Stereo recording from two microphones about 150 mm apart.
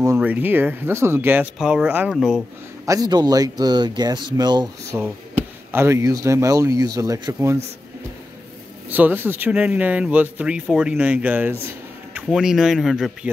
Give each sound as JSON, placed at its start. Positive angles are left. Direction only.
{"t": 0.2, "sound": "a man's voice", "side_deg": -10}
{"t": 2.8, "sound": "speech", "side_deg": -20}
{"t": 4.9, "sound": "speech", "side_deg": -15}
{"t": 8.8, "sound": "a man's voice", "side_deg": -10}